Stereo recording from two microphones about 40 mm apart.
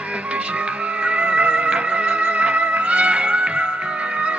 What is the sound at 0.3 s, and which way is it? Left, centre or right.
Music, right.